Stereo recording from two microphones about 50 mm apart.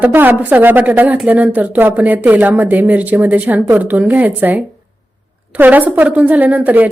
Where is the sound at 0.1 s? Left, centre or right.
Right.